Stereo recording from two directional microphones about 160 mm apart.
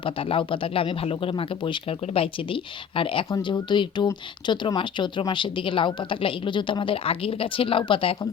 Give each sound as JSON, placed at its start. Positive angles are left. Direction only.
{"t": 0.0, "sound": "speech", "side_deg": 35}
{"t": 3.2, "sound": "speech", "side_deg": 20}